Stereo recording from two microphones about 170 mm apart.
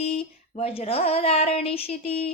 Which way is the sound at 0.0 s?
35° left (ahead or behind).